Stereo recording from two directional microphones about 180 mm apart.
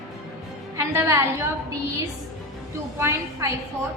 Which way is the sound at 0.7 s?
15° right (ahead or behind).